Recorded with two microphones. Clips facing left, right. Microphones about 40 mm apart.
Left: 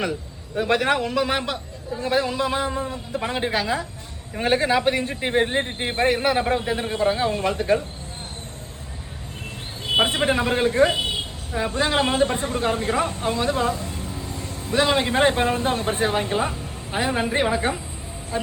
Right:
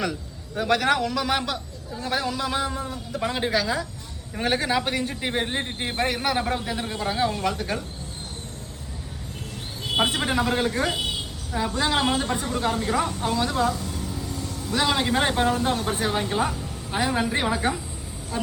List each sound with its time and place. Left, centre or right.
0.0 s a sound: left
0.7 s a man's voice: left
9.8 s a woman's voice: left